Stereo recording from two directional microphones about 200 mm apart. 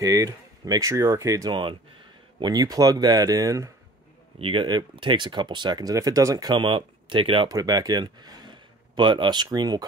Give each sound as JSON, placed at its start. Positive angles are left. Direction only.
{"t": 0.0, "sound": "speech", "side_deg": -15}